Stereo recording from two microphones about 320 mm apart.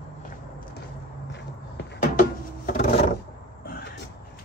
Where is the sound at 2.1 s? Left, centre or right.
Left.